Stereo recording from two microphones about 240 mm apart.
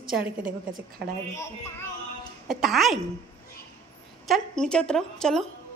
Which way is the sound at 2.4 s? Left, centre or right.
Centre.